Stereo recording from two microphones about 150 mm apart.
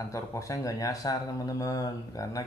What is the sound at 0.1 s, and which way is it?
Speech, 20° left (ahead or behind).